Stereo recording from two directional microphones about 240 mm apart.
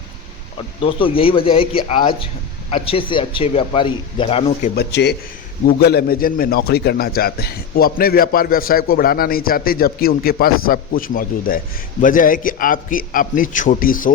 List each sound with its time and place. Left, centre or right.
0.8 s a man's voice: left
4.7 s a man's voice: left